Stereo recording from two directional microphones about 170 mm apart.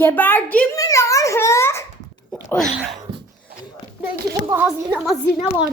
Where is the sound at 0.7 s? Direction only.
20° left (ahead or behind).